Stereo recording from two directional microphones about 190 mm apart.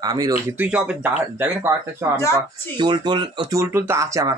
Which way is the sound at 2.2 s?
15° left (ahead or behind).